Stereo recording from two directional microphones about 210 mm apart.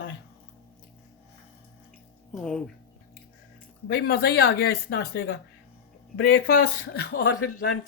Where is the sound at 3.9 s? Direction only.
45° left (ahead or behind).